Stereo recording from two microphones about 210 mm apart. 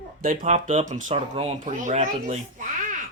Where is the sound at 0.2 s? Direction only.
40° right (ahead or behind).